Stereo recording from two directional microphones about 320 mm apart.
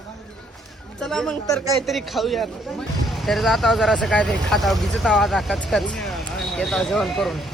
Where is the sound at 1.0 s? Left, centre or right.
Centre.